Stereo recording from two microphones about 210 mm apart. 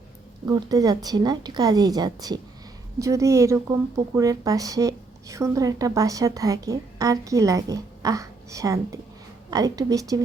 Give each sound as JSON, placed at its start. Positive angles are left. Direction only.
{"t": 0.4, "sound": "a woman's voice", "side_deg": -20}